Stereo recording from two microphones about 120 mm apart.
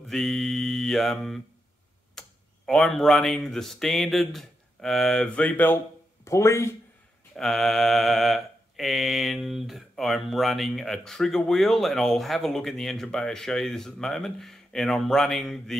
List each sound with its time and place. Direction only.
0.0 s mantra: 5° left (ahead or behind)
2.1 s speech: 5° left (ahead or behind); by 6.7 s 25° left (ahead or behind)
7.3 s mantra: 5° left (ahead or behind)